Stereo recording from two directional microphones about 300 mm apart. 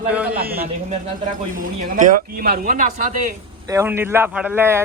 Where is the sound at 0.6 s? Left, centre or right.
Right.